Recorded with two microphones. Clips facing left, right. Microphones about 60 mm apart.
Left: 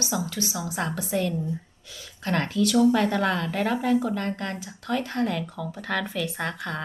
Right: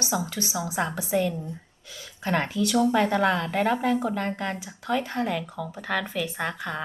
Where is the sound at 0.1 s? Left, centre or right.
Centre.